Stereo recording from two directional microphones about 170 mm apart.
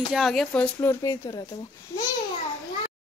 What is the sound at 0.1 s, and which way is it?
Speech, centre (ahead or behind).